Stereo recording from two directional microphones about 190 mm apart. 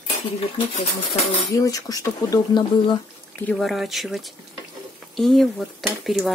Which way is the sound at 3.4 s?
5° left (ahead or behind).